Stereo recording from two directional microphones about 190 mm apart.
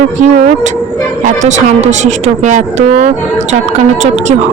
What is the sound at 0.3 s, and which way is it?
A woman's voice, 40° right (ahead or behind).